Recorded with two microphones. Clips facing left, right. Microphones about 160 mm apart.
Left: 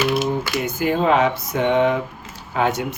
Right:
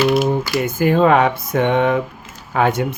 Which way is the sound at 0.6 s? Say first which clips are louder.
Right 6 dB; 55° right (ahead or behind).